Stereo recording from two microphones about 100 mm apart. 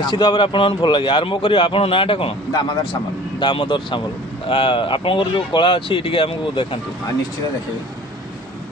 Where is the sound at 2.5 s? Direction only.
50° left (ahead or behind).